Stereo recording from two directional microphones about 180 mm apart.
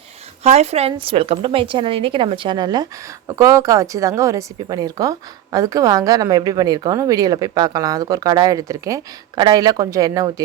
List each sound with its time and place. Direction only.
0.4 s a woman's voice: 35° right (ahead or behind); by 10.4 s 20° right (ahead or behind)